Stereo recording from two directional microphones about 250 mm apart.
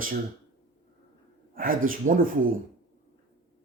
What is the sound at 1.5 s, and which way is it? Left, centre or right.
Speech, right.